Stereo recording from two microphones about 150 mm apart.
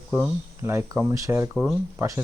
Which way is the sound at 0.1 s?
15° right (ahead or behind).